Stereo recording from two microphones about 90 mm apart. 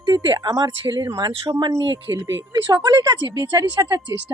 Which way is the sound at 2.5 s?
45° right (ahead or behind).